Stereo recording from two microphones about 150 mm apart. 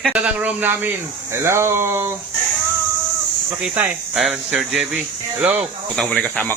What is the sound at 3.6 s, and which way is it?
Speech, 5° right (ahead or behind).